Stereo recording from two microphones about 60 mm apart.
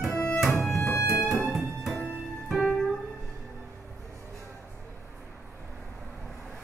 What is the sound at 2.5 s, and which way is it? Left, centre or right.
Music, centre.